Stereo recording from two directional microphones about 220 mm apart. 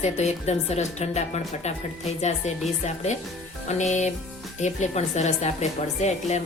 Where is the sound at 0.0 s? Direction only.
30° left (ahead or behind).